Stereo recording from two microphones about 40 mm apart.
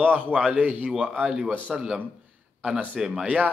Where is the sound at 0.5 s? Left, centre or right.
Right.